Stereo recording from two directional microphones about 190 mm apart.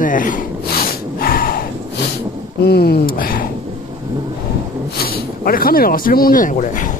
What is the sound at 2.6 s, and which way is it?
Speech, 55° left (ahead or behind).